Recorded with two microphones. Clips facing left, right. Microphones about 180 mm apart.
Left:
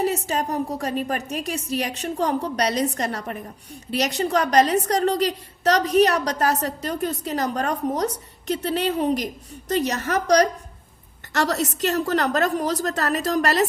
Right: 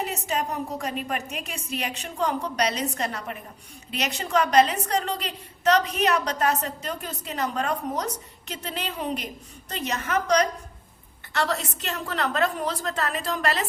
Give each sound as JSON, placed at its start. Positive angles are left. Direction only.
{"t": 0.0, "sound": "a woman's voice", "side_deg": 35}